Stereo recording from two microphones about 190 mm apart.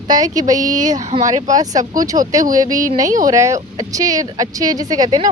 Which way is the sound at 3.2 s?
15° right (ahead or behind).